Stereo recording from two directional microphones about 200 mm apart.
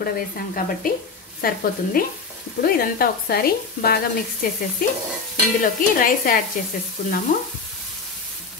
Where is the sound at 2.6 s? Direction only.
50° left (ahead or behind).